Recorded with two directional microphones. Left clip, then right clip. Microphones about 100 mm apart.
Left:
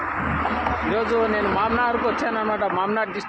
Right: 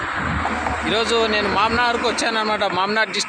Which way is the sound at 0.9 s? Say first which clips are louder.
Right 4 dB; 15° right (ahead or behind).